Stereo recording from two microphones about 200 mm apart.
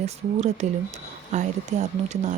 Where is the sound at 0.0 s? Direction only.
35° right (ahead or behind).